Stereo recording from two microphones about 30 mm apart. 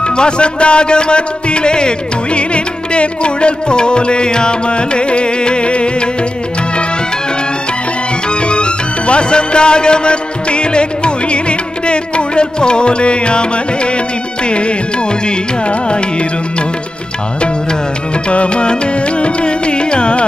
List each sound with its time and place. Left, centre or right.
0.0 s music: left
8.3 s music: left
18.3 s music: left